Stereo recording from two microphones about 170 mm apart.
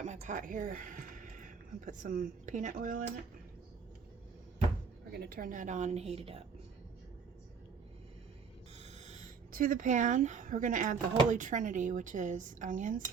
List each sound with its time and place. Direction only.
0.0 s speech: 45° right (ahead or behind)
5.1 s speech: 60° right (ahead or behind); by 6.4 s 35° right (ahead or behind)
8.8 s a sound: 40° right (ahead or behind)
9.5 s speech: 55° right (ahead or behind)